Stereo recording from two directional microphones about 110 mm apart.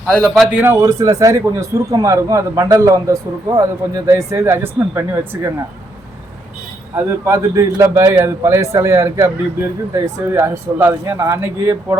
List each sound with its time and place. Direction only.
0.1 s a man's voice: centre (ahead or behind)
0.4 s a man's voice: 15° right (ahead or behind)
0.9 s speech: 30° right (ahead or behind)
6.9 s speech: 25° right (ahead or behind)